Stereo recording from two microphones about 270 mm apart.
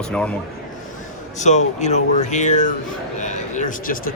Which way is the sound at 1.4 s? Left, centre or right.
Left.